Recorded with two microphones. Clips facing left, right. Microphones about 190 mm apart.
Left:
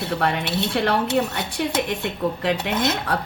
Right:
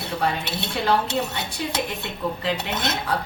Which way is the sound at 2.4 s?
65° left (ahead or behind).